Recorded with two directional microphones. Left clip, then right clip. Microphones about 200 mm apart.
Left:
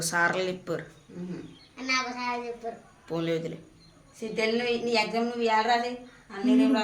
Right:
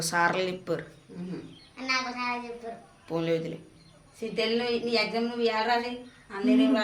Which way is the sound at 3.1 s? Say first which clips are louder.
Right 1 dB; centre (ahead or behind).